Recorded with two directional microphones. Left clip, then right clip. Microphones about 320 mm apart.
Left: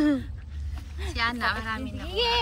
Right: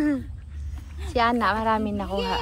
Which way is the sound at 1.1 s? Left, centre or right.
Centre.